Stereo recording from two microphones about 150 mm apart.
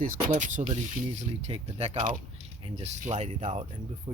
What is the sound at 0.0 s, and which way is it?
Mechanisms, 55° right (ahead or behind).